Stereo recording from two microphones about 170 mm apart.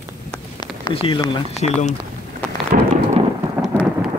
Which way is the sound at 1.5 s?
40° left (ahead or behind).